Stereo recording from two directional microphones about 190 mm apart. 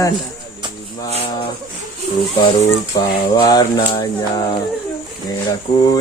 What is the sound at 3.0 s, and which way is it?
Speech, 20° left (ahead or behind).